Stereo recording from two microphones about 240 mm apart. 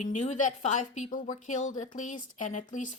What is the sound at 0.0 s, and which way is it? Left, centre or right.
A woman's voice, left.